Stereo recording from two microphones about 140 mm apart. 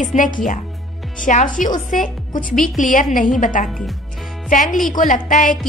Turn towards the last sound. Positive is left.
turn(degrees=70)  # may be behind; listen again after turning